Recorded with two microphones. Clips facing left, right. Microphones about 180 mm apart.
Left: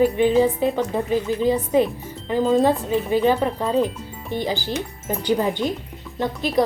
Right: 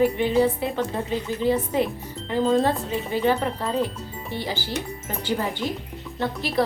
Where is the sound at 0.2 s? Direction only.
15° left (ahead or behind).